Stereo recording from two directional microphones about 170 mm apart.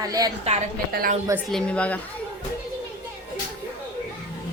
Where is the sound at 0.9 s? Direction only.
60° right (ahead or behind).